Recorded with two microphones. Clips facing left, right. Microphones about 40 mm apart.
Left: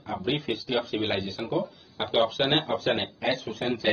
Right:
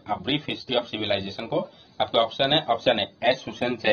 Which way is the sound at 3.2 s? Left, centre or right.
Right.